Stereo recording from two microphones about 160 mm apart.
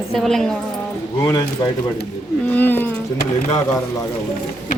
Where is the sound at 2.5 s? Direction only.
10° left (ahead or behind).